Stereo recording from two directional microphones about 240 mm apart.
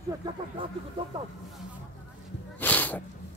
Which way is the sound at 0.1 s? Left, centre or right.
Centre.